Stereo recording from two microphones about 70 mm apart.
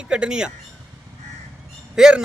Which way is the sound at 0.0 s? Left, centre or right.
Centre.